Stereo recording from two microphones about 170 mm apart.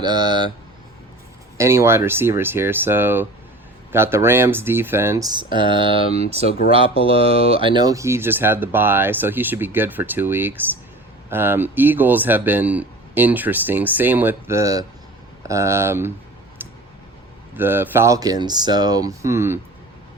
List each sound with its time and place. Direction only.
0.0 s speech: 25° right (ahead or behind)
1.5 s speech: 15° right (ahead or behind)
16.6 s a sound: 10° right (ahead or behind)
17.6 s speech: 10° right (ahead or behind)